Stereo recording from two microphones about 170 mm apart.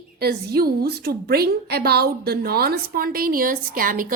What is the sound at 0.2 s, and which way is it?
A woman's voice, 65° right (ahead or behind).